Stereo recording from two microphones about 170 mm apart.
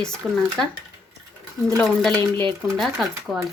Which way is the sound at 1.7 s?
Centre (ahead or behind).